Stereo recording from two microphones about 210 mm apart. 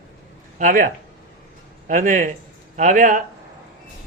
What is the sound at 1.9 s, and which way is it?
Speech, 40° right (ahead or behind).